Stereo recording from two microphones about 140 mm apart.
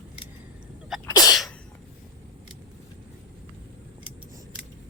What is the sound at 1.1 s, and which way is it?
Sneeze, 30° left (ahead or behind).